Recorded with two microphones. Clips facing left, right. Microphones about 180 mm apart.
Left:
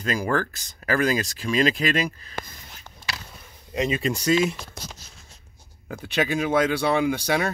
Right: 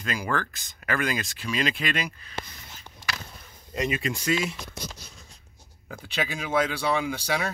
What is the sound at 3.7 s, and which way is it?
Speech, 25° left (ahead or behind).